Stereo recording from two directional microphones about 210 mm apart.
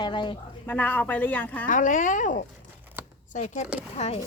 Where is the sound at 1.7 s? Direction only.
35° left (ahead or behind).